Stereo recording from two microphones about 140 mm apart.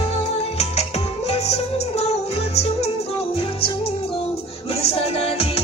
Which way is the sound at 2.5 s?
50° left (ahead or behind).